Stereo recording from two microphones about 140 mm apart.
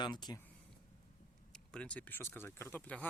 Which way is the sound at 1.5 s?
5° left (ahead or behind).